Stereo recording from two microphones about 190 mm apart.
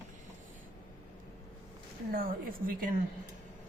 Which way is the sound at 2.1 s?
50° right (ahead or behind).